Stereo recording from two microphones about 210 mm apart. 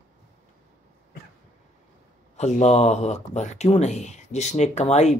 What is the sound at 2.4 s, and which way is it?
Speech, 30° left (ahead or behind).